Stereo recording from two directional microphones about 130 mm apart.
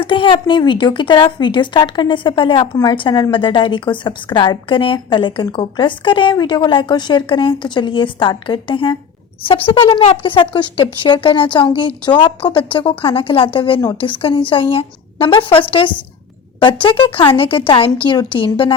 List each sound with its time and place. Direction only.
0.0 s a woman's voice: 40° left (ahead or behind)